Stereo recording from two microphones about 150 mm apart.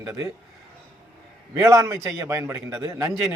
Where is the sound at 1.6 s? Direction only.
20° right (ahead or behind).